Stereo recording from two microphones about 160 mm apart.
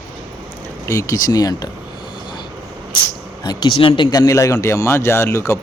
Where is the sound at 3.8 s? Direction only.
30° left (ahead or behind); by 5.6 s 15° left (ahead or behind).